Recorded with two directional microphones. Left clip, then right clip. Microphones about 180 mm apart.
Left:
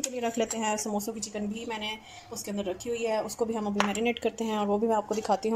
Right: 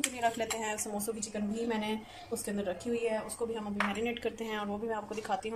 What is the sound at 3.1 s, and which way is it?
A woman's voice, 25° left (ahead or behind).